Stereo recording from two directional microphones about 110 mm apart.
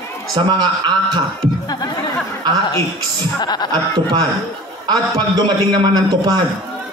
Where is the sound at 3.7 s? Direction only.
35° right (ahead or behind).